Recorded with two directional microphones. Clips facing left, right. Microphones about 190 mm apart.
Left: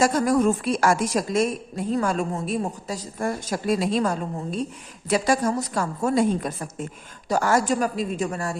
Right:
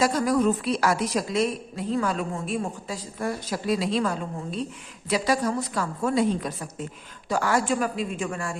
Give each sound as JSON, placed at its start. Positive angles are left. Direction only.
{"t": 0.0, "sound": "a woman's voice", "side_deg": 45}